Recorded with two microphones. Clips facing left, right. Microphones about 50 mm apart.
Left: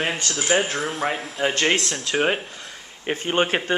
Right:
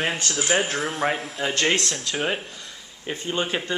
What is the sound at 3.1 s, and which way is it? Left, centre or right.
Speech, left.